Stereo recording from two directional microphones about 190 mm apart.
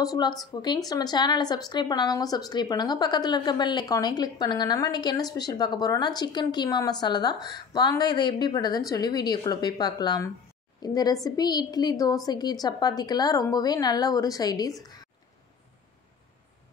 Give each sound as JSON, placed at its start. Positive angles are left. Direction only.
{"t": 0.0, "sound": "speech", "side_deg": 20}